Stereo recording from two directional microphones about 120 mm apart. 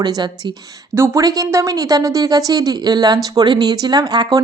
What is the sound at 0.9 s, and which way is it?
Speech, 25° right (ahead or behind).